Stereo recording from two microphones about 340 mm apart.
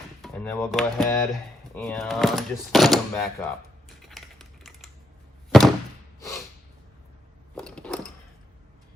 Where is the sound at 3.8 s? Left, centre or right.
Centre.